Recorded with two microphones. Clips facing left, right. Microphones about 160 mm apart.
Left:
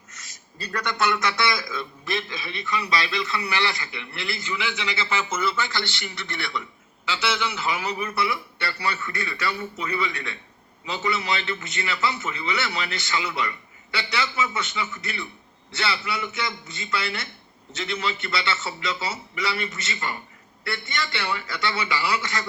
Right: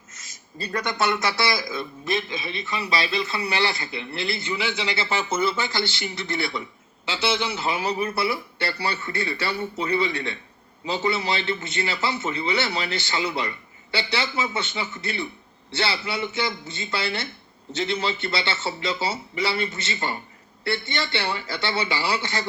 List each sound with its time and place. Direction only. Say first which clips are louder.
0.1 s a man's voice: right 4 dB; 25° right (ahead or behind)